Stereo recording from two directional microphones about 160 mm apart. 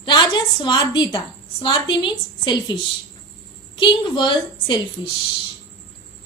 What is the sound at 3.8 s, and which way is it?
A woman's voice, 30° left (ahead or behind).